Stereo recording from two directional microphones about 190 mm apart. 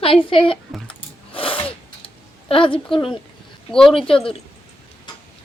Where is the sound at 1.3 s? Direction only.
30° left (ahead or behind).